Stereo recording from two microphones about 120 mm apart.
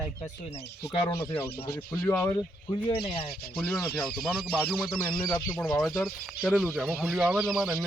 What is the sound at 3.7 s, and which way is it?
Speech, 5° left (ahead or behind).